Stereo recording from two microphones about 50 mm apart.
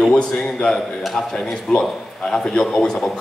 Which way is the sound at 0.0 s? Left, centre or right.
Centre.